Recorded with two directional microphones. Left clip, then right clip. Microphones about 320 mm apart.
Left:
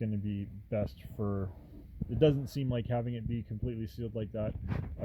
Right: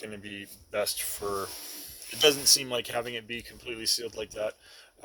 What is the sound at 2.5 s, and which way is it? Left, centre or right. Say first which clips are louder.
Speech: right 9 dB; centre.